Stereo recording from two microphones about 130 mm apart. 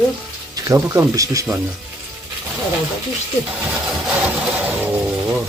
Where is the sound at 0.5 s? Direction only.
25° right (ahead or behind).